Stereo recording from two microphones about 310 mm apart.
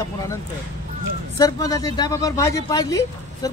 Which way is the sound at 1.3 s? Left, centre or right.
Centre.